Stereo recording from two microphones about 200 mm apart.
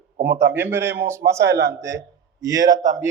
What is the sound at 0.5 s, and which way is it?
Speech, 10° right (ahead or behind).